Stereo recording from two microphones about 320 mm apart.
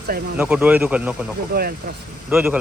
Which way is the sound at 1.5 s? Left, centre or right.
Right.